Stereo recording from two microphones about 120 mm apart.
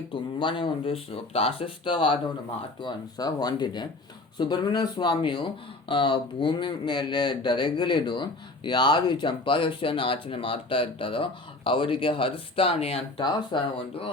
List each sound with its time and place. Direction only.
0.1 s speech: 45° left (ahead or behind)
2.8 s speech: 35° left (ahead or behind); by 13.2 s 55° left (ahead or behind)
13.5 s speech: 40° left (ahead or behind)